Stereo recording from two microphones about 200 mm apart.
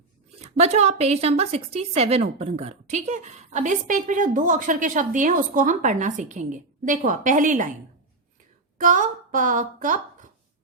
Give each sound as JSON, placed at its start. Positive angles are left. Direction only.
{"t": 0.4, "sound": "a woman's voice", "side_deg": -35}
{"t": 8.8, "sound": "a woman's voice", "side_deg": -40}